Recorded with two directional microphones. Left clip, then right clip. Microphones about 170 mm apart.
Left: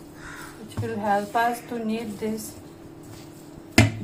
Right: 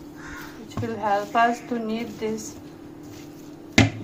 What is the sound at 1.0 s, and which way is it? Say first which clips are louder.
Speech: right 2 dB; 30° right (ahead or behind).